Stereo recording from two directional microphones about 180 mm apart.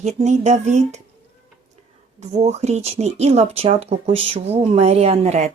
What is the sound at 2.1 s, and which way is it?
Speech, 40° right (ahead or behind).